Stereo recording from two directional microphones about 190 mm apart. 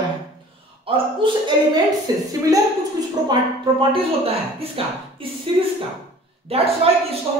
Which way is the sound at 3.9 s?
30° right (ahead or behind).